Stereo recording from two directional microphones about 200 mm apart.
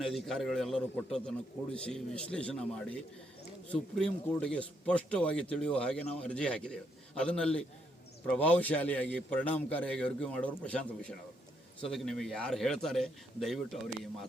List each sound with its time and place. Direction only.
0.0 s a man's voice: centre (ahead or behind)